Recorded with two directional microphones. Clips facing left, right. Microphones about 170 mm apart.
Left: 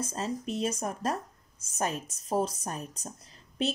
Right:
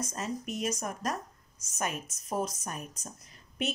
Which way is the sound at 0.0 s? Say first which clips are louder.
Left 2 dB; 30° left (ahead or behind).